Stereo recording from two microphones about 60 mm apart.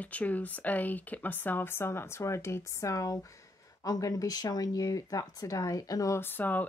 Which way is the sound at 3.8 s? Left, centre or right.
Left.